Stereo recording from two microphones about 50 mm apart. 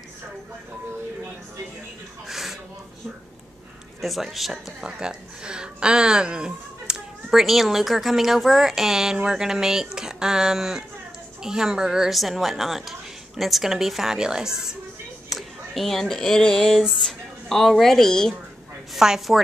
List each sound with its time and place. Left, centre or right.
2.2 s a sound: centre
4.0 s a woman's voice: centre
4.8 s a woman's voice: centre
12.1 s a woman's voice: centre
16.7 s speech: centre
18.9 s a woman's voice: centre